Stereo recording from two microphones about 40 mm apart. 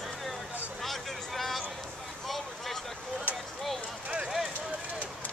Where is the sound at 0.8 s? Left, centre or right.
Centre.